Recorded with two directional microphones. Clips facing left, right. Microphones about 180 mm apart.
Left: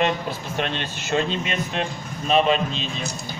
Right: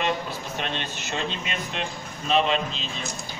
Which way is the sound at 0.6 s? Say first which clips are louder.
Left 4 dB; 50° left (ahead or behind).